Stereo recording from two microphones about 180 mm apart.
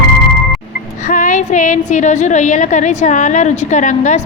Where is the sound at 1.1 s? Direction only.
45° left (ahead or behind).